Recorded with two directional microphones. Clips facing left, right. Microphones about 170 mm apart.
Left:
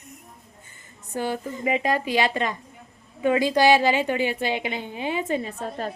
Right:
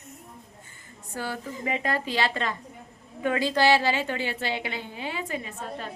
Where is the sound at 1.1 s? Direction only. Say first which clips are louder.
Left 5 dB; 20° left (ahead or behind).